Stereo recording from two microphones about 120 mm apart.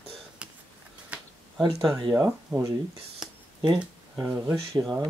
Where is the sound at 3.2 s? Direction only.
5° right (ahead or behind).